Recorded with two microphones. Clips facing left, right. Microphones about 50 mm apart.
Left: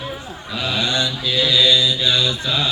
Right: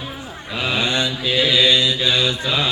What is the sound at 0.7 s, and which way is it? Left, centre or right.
Mantra, right.